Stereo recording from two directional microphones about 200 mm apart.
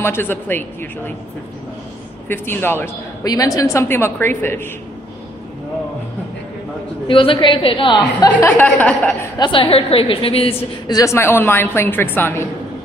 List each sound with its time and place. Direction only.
0.0 s a woman's voice: 10° left (ahead or behind)
2.2 s a woman's voice: 10° left (ahead or behind)
7.1 s a woman's voice: 25° left (ahead or behind); by 9.3 s 10° left (ahead or behind)
9.4 s a woman's voice: 25° left (ahead or behind)